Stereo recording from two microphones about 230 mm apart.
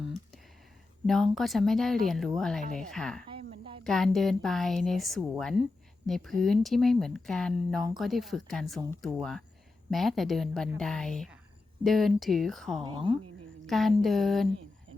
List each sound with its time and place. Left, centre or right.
1.0 s speech: centre
3.2 s snake: right
3.8 s speech: centre
12.8 s a woman's voice: centre
13.7 s speech: centre